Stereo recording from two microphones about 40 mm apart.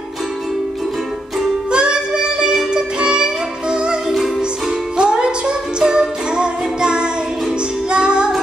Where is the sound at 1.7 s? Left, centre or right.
Right.